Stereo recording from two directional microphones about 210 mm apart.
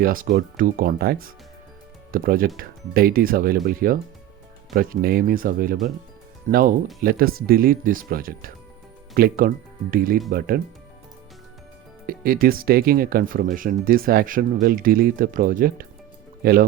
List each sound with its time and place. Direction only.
0.0 s speech: 40° right (ahead or behind)
12.0 s speech: 45° right (ahead or behind)